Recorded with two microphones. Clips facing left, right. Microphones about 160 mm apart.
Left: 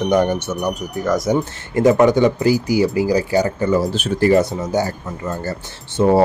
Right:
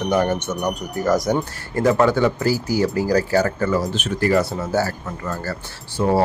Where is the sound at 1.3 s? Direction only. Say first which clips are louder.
Left 4 dB; 20° left (ahead or behind).